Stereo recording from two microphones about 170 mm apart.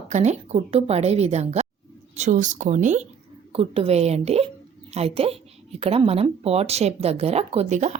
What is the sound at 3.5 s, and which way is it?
A woman's voice, 35° right (ahead or behind).